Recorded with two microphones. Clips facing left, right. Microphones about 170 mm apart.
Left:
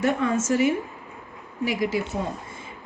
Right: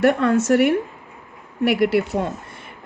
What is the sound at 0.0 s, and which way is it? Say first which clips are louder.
A woman's voice: right 6 dB; 70° right (ahead or behind).